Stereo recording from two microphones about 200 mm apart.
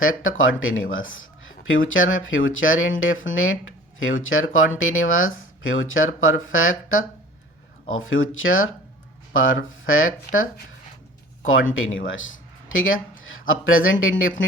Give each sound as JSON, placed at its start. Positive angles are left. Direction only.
{"t": 0.0, "sound": "speech", "side_deg": 90}
{"t": 11.4, "sound": "speech", "side_deg": 85}